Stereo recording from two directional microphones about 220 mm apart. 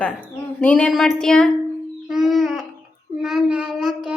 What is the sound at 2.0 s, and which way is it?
Babbling, centre (ahead or behind).